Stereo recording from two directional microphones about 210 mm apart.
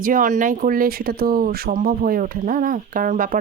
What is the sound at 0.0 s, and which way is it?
Speech, 40° right (ahead or behind).